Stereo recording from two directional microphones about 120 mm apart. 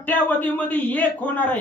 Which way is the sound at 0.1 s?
15° left (ahead or behind).